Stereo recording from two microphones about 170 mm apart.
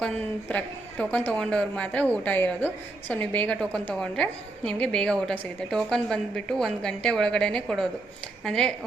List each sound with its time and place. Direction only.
0.0 s a woman's voice: 10° left (ahead or behind)